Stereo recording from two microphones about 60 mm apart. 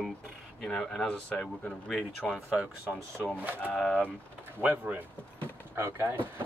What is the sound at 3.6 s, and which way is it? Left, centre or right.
Speech, centre.